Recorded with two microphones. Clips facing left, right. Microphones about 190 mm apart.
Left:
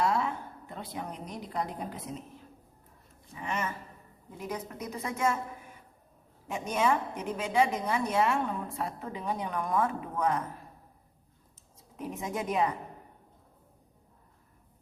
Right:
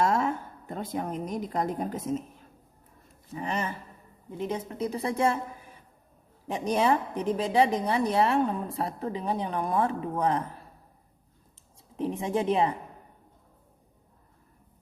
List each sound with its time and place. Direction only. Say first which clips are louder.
0.0 s a woman's voice: right 3 dB; 45° right (ahead or behind)
3.3 s a woman's voice: right 3 dB; 35° right (ahead or behind)
6.5 s a woman's voice: right 4 dB; 35° right (ahead or behind)
11.9 s a woman's voice: right 7 dB; 30° right (ahead or behind)